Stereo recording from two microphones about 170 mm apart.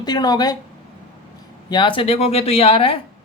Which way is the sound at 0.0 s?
25° left (ahead or behind).